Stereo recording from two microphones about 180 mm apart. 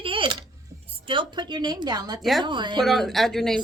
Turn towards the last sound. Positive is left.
turn(degrees=0)  # may be behind; listen again after turning